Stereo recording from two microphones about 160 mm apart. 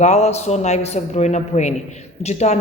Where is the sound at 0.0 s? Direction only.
45° left (ahead or behind).